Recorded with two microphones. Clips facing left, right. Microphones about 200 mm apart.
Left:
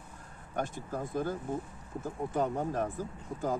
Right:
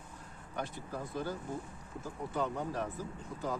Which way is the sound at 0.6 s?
45° left (ahead or behind).